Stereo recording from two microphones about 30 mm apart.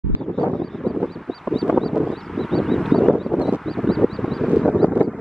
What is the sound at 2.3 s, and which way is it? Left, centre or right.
Vehicle, centre.